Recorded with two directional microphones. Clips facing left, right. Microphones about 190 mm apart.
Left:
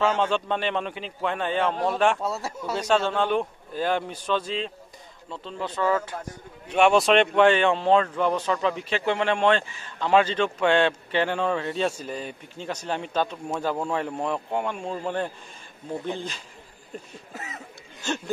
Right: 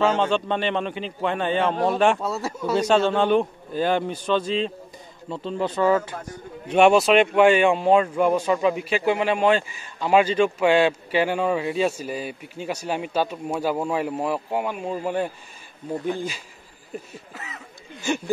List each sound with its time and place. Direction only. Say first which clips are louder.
0.0 s a man's voice: right 3 dB; 5° left (ahead or behind)
5.3 s speech: right 7 dB; 10° right (ahead or behind)
17.3 s speech: left 3 dB; 40° left (ahead or behind)
18.0 s speech: right 4 dB; 10° right (ahead or behind)